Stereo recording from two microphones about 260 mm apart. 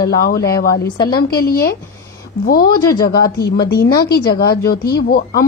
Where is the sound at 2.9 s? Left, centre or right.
Left.